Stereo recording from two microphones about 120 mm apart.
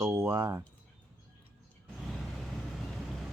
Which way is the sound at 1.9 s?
Centre (ahead or behind).